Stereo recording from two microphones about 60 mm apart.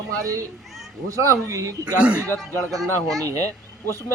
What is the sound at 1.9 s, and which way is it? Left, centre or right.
Speech, right.